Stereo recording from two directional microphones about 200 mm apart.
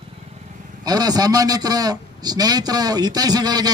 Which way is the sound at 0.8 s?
20° right (ahead or behind).